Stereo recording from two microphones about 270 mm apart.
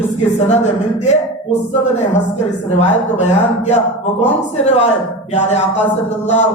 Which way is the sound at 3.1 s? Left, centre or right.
Left.